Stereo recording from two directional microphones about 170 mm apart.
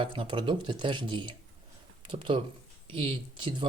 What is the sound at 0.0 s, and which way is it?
Speech, 30° right (ahead or behind).